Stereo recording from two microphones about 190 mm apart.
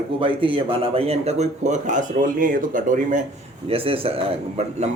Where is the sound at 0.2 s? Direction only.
30° right (ahead or behind); by 3.2 s 45° right (ahead or behind).